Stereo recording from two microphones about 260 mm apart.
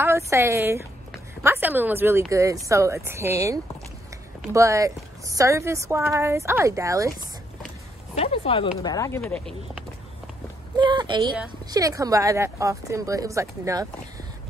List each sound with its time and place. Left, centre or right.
0.0 s a woman's voice: centre
8.2 s speech: left
9.2 s speech: centre
10.8 s a sound: centre
11.6 s a woman's voice: centre